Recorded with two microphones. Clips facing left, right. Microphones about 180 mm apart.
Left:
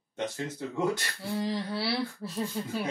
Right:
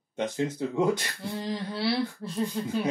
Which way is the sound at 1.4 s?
Centre (ahead or behind).